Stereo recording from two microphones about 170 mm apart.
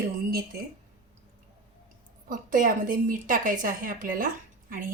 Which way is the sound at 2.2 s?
55° right (ahead or behind).